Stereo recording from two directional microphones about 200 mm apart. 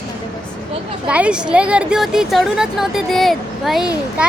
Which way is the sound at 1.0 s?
5° right (ahead or behind).